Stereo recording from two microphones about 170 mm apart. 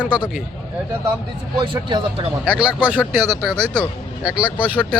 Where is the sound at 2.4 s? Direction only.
5° right (ahead or behind).